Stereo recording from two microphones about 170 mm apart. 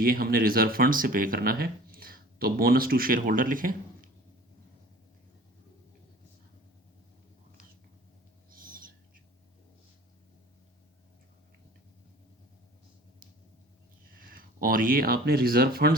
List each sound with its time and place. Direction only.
0.0 s speech: 60° right (ahead or behind)
8.4 s owl: 55° right (ahead or behind)
14.2 s speech: 55° right (ahead or behind)